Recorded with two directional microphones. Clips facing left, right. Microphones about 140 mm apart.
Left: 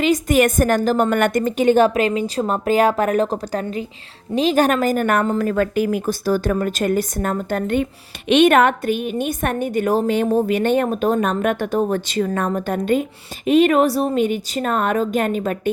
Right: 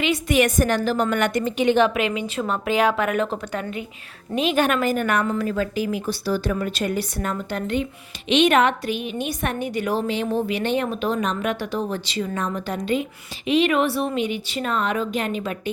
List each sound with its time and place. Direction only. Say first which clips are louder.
0.0 s a woman's voice: left 4 dB; 45° left (ahead or behind)